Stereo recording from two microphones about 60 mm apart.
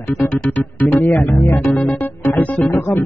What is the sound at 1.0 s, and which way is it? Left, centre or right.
Music, left.